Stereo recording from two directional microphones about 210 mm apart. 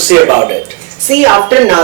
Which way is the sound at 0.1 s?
15° right (ahead or behind).